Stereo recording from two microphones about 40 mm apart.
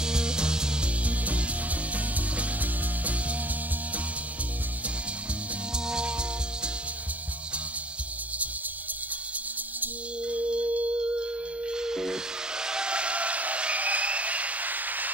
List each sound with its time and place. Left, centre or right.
0.0 s music: centre
1.0 s music: right
5.9 s music: right
10.2 s music: right
11.7 s steam whistle: centre; by 15.0 s right